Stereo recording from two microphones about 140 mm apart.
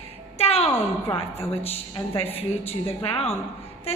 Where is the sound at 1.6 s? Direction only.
45° left (ahead or behind).